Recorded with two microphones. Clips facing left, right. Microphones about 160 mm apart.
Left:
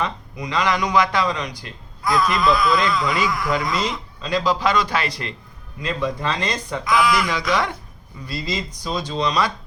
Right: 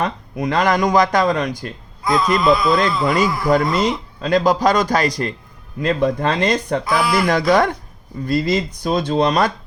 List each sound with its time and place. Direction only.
0.0 s a man's voice: 55° right (ahead or behind)
2.0 s a man's voice: 20° right (ahead or behind)
3.1 s speech: 40° right (ahead or behind)
3.6 s a man's voice: 55° right (ahead or behind)
6.8 s speech: 30° right (ahead or behind)
7.2 s a man's voice: 50° right (ahead or behind)